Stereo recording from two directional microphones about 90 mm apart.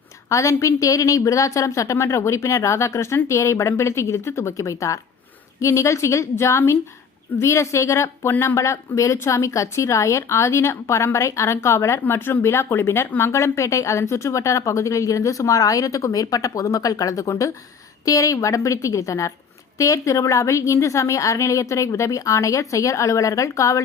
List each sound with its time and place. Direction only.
0.3 s a woman's voice: 35° left (ahead or behind)